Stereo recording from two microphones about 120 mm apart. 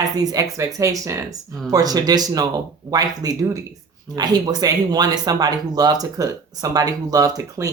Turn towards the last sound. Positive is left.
turn(degrees=-30)  # may be behind; listen again after turning